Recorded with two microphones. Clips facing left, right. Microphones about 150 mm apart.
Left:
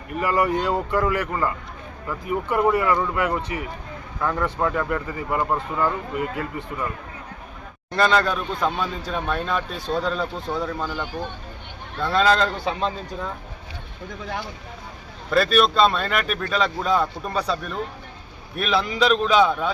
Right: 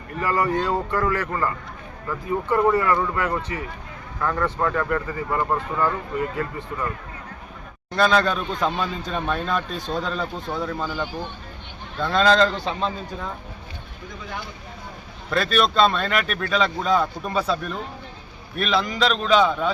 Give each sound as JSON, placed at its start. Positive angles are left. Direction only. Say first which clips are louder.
{"t": 0.1, "sound": "speech", "louder": "left 1 dB", "side_deg": 15}
{"t": 7.9, "sound": "speech", "louder": "even", "side_deg": 0}
{"t": 15.3, "sound": "speech", "louder": "left 3 dB", "side_deg": 0}